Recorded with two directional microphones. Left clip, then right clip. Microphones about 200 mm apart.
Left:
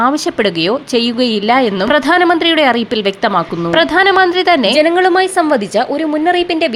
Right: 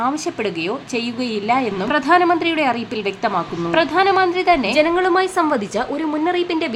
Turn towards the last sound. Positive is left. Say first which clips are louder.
# left 7 dB
turn(degrees=10)  # may be behind; listen again after turning